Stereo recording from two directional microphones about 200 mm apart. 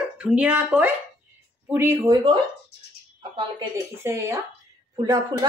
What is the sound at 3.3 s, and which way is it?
A woman's voice, 20° right (ahead or behind).